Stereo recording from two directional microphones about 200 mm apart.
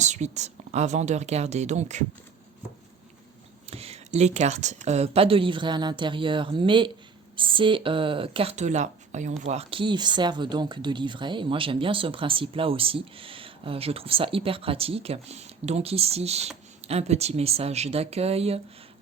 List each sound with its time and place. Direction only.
0.0 s a woman's voice: 35° right (ahead or behind)
3.7 s a woman's voice: 30° right (ahead or behind)